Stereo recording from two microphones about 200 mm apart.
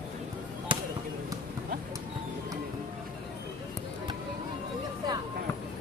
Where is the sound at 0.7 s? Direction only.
25° right (ahead or behind).